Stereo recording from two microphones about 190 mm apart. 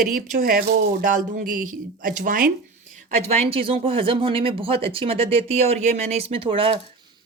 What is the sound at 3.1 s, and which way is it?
Speech, 35° right (ahead or behind).